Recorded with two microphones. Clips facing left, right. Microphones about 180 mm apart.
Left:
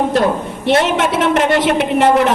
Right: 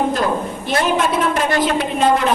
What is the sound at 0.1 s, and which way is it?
A woman's voice, 75° left (ahead or behind).